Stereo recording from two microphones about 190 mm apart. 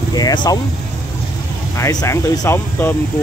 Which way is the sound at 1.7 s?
15° left (ahead or behind).